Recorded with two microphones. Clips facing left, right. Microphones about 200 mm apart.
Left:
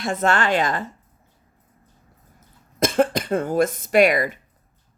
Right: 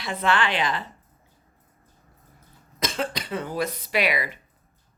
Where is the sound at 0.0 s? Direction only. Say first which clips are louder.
Left 3 dB; 45° left (ahead or behind).